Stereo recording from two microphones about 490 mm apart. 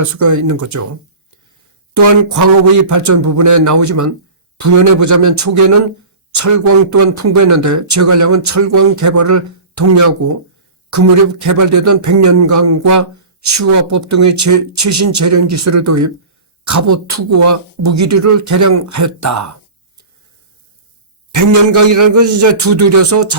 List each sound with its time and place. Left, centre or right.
0.2 s speech: right
1.9 s speech: right
21.3 s speech: right